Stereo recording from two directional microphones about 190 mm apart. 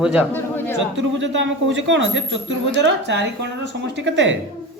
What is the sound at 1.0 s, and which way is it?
Speech, 75° right (ahead or behind).